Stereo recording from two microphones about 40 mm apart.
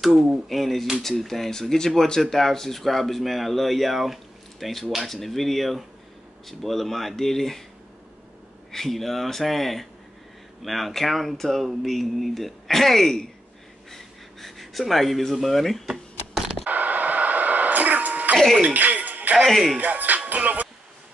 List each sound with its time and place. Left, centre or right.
0.0 s speech: centre
8.7 s speech: centre
13.9 s gasp: centre
15.4 s speech: centre
16.6 s a sound: right
18.6 s music: right
19.4 s speech: centre
19.8 s music: right